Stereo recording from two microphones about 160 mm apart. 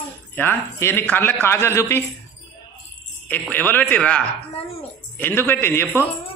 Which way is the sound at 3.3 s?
10° left (ahead or behind).